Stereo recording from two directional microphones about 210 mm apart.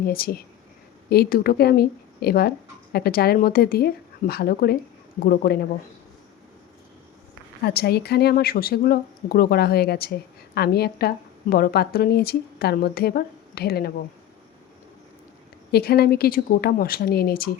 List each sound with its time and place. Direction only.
0.0 s speech: 45° left (ahead or behind)
7.6 s speech: 50° left (ahead or behind)
15.7 s speech: 50° left (ahead or behind)